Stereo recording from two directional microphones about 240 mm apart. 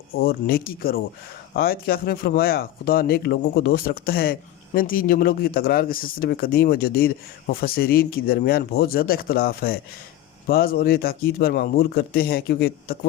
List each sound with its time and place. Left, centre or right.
0.1 s speech: left